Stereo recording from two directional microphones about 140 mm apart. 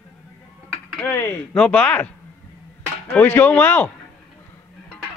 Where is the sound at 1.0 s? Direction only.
20° left (ahead or behind).